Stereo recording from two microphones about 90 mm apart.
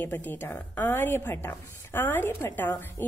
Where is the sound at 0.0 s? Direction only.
20° left (ahead or behind).